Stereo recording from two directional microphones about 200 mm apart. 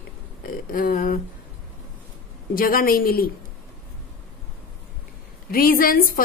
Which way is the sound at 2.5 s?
45° left (ahead or behind).